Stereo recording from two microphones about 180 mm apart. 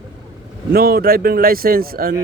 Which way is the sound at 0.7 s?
60° right (ahead or behind).